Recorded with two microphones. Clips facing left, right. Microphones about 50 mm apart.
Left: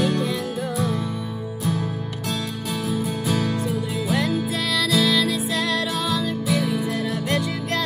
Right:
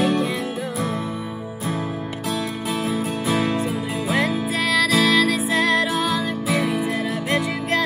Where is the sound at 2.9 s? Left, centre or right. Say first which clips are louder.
Even; right.